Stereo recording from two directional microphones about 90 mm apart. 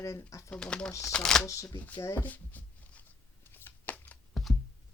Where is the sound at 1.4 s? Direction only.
35° left (ahead or behind); by 3.1 s 20° left (ahead or behind).